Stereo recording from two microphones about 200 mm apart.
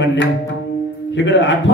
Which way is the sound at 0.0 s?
65° left (ahead or behind).